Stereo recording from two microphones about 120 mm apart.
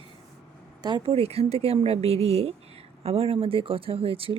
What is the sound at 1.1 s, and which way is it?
Speech, 55° right (ahead or behind).